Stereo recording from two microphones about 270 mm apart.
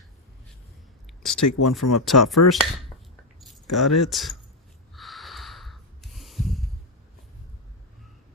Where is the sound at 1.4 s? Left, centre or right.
Left.